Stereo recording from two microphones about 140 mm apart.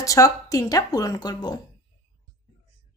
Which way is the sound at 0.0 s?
25° left (ahead or behind).